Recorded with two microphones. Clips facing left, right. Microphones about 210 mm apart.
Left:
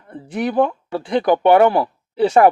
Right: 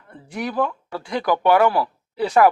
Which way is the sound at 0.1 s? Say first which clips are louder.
Left 6 dB; 25° left (ahead or behind).